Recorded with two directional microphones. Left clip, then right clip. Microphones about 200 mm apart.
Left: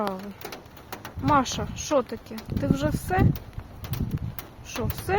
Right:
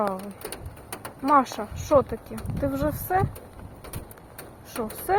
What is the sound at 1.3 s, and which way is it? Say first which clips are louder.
Speech: right 2 dB; 20° left (ahead or behind).